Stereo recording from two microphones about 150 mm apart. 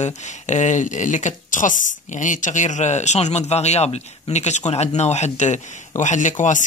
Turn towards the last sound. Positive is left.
turn(degrees=55)  # may be behind; listen again after turning